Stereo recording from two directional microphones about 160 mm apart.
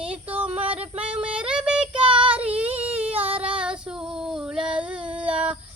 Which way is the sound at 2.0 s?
30° right (ahead or behind).